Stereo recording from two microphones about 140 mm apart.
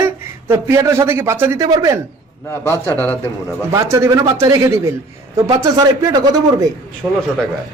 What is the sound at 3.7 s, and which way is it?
Speech, 20° right (ahead or behind).